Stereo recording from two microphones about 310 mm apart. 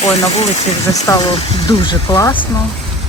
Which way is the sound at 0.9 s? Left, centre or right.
Centre.